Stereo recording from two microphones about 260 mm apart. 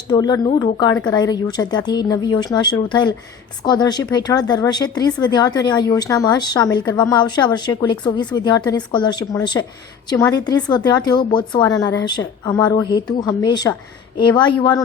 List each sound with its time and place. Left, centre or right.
0.1 s a woman's voice: centre